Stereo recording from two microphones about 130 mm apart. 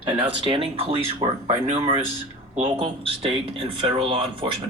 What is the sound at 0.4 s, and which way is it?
Speech, 45° right (ahead or behind).